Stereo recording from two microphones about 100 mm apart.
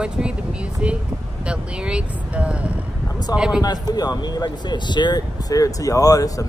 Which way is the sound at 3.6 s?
40° left (ahead or behind).